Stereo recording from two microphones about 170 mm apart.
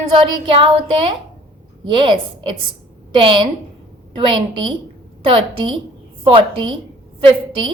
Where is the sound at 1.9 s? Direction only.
30° right (ahead or behind).